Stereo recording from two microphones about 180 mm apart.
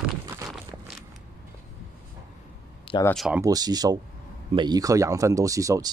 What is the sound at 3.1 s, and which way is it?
Speech, centre (ahead or behind).